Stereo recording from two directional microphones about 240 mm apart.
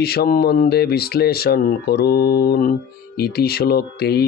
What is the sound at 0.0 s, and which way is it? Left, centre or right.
Speech, left.